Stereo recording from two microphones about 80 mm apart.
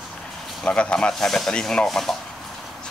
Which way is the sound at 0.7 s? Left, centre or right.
Centre.